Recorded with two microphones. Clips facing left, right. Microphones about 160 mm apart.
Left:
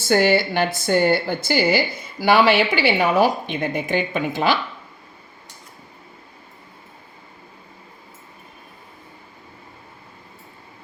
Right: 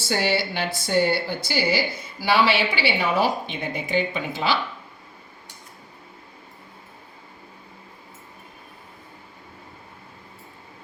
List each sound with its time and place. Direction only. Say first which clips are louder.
0.0 s a woman's voice: left 7 dB; 50° left (ahead or behind)